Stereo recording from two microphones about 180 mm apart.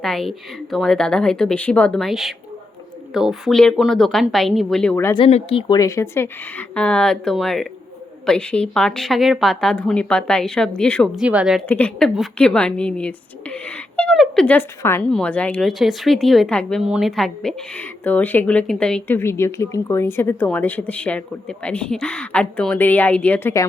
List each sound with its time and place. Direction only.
0.0 s speech: 5° left (ahead or behind)
5.1 s a woman's voice: 30° left (ahead or behind); by 11.1 s 5° left (ahead or behind)
11.2 s speech: 5° right (ahead or behind)
11.7 s a woman's voice: 5° left (ahead or behind)